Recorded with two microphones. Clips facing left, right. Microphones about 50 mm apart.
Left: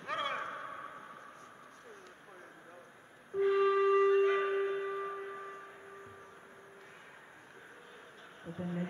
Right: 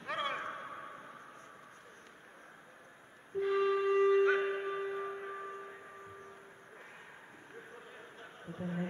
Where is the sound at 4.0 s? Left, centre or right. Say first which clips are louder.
Even; centre.